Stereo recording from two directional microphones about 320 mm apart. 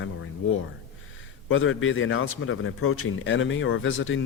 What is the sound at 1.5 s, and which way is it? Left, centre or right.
Speech, left.